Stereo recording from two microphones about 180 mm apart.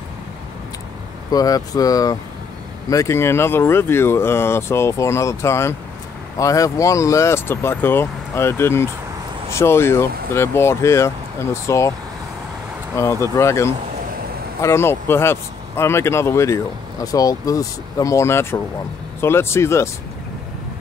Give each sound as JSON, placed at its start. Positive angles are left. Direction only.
{"t": 1.3, "sound": "speech", "side_deg": 20}
{"t": 12.9, "sound": "speech", "side_deg": 15}